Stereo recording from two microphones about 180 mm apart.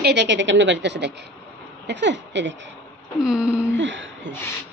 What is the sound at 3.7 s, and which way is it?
Speech, 90° right.